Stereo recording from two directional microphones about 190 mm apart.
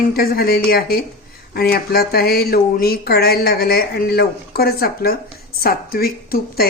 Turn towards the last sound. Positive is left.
turn(degrees=50)  # may be behind; listen again after turning